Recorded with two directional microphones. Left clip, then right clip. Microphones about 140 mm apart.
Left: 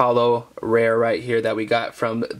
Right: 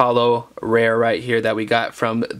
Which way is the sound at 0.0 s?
15° right (ahead or behind).